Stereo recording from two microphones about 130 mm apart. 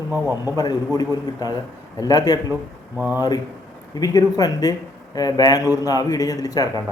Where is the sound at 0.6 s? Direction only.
30° left (ahead or behind).